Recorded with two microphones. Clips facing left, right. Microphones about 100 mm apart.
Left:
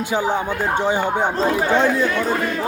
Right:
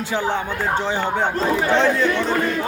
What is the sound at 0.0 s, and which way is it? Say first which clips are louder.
Battle cry: left 2 dB; 15° left (ahead or behind).